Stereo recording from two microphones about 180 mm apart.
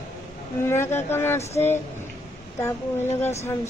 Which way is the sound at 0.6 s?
15° left (ahead or behind).